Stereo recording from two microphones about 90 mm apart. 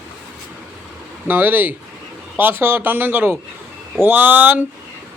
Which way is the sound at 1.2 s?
20° right (ahead or behind).